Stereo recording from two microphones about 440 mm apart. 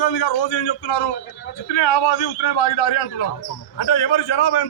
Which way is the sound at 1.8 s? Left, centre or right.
Left.